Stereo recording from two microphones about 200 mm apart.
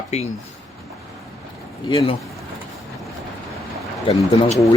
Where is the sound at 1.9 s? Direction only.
25° left (ahead or behind).